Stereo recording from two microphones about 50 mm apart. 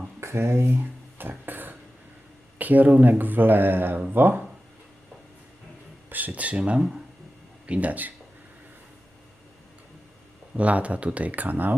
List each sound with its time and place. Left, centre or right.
0.2 s speech: right
1.3 s a sound: right
2.6 s speech: right
6.1 s speech: right
10.5 s speech: right